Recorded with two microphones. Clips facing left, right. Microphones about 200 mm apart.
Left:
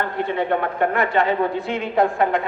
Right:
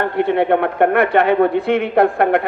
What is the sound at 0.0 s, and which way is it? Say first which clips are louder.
Speech: right 7 dB; 60° right (ahead or behind).